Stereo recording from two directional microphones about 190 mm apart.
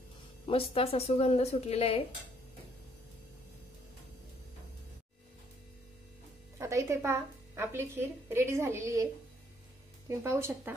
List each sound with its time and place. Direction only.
0.5 s speech: 30° left (ahead or behind)
6.6 s a woman's voice: 15° right (ahead or behind)